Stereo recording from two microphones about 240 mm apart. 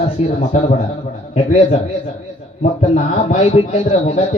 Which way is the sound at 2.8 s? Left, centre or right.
Left.